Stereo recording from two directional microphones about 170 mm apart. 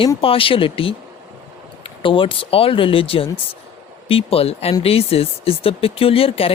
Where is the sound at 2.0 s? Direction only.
30° left (ahead or behind).